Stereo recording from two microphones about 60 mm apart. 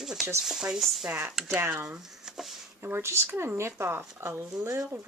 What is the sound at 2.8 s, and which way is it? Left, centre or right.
Speech, right.